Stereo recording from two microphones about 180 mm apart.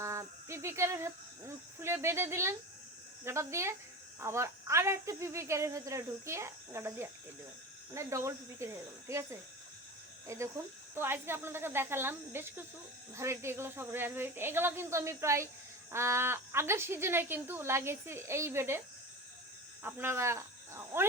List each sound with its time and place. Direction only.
0.0 s speech: 15° right (ahead or behind)
19.8 s speech: 15° right (ahead or behind)